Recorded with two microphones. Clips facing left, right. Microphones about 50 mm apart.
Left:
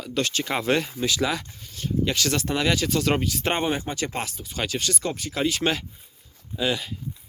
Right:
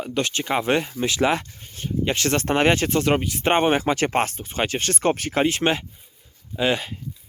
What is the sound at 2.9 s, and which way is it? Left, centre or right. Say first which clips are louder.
Speech: right 3 dB; right.